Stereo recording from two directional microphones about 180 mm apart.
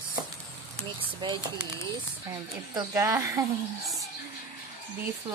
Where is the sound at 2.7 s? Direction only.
20° right (ahead or behind).